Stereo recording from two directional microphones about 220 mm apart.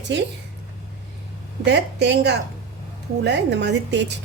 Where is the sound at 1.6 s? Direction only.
50° right (ahead or behind).